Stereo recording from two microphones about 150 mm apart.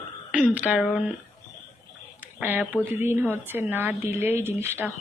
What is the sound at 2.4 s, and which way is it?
Speech, 10° right (ahead or behind).